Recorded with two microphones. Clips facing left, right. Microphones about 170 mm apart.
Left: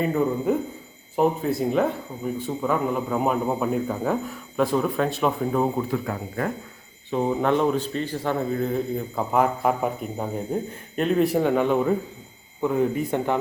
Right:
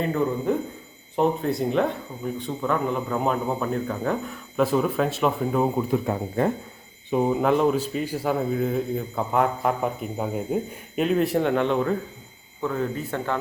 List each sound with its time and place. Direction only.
0.0 s a man's voice: 5° left (ahead or behind)
5.9 s speech: 25° right (ahead or behind)
7.1 s a man's voice: 5° right (ahead or behind); by 13.3 s 15° left (ahead or behind)